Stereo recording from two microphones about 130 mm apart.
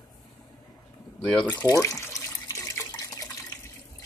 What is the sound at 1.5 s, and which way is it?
Water, 25° left (ahead or behind).